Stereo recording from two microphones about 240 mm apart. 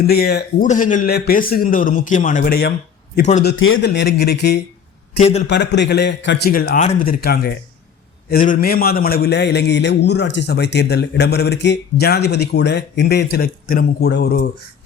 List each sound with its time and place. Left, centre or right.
0.0 s a man's voice: left
3.4 s a man's voice: left
5.1 s a man's voice: left
5.5 s a man's voice: left